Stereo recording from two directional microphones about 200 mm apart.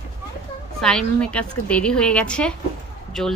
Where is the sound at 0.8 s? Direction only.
5° left (ahead or behind).